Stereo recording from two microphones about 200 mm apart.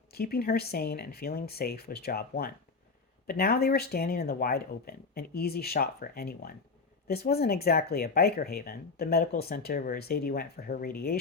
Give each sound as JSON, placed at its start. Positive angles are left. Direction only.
{"t": 0.1, "sound": "speech", "side_deg": 50}